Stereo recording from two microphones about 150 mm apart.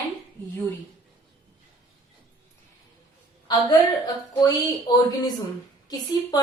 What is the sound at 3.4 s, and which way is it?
A woman's voice, 25° left (ahead or behind).